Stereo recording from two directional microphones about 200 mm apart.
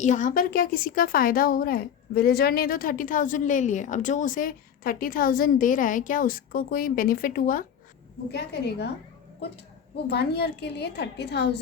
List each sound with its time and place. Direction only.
0.0 s a woman's voice: 40° left (ahead or behind)
10.1 s a woman's voice: 55° left (ahead or behind)